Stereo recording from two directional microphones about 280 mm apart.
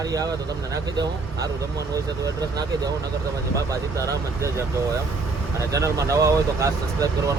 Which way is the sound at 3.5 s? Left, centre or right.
Centre.